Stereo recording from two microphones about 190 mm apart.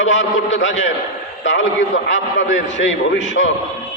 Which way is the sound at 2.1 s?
80° left.